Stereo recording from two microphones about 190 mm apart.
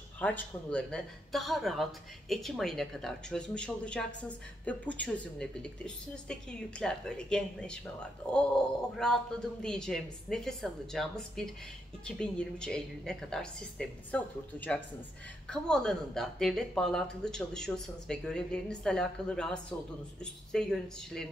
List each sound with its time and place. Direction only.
0.2 s speech: 10° left (ahead or behind)